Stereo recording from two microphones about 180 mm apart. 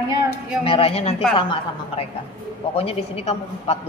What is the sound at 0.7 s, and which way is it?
Speech, 30° left (ahead or behind).